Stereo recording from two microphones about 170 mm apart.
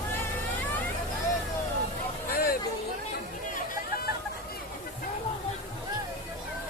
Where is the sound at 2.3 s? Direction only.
60° left (ahead or behind).